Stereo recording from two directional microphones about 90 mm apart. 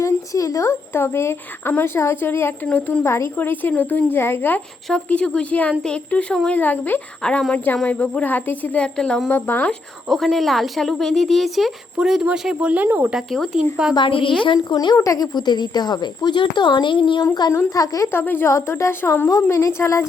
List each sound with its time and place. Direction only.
0.0 s a woman's voice: 35° left (ahead or behind)
2.6 s speech: 15° left (ahead or behind)
3.0 s a woman's voice: 30° left (ahead or behind)
3.3 s speech: 20° left (ahead or behind)
6.6 s speech: 20° left (ahead or behind)
7.2 s speech: 10° left (ahead or behind)
9.3 s speech: 20° left (ahead or behind)
10.1 s a woman's voice: centre (ahead or behind); by 12.9 s 15° right (ahead or behind)
13.1 s speech: centre (ahead or behind)
13.9 s a woman's voice: 70° left (ahead or behind)
14.7 s speech: 55° left (ahead or behind)
14.9 s speech: 40° left (ahead or behind); by 17.2 s 65° left (ahead or behind)
17.7 s a woman's voice: 40° left (ahead or behind)
18.1 s a woman's voice: 25° left (ahead or behind)